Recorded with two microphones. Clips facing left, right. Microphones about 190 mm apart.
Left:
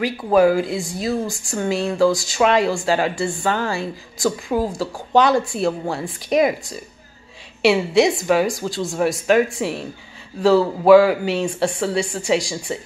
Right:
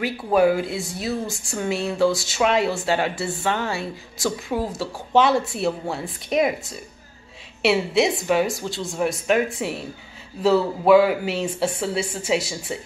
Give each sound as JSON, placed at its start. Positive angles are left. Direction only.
{"t": 0.0, "sound": "speech", "side_deg": 0}
{"t": 10.9, "sound": "speech", "side_deg": 0}